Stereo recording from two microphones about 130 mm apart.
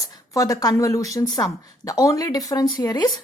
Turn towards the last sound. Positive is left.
turn(degrees=30)  # may be behind; listen again after turning